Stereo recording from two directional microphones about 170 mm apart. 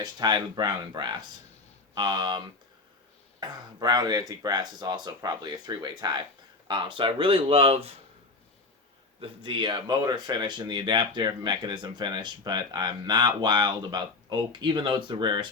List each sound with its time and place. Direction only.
0.0 s speech: 25° right (ahead or behind)
3.4 s speech: 25° right (ahead or behind)
9.2 s speech: 30° right (ahead or behind)